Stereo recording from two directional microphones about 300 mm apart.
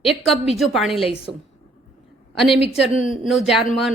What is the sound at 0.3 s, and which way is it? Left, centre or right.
Speech, centre.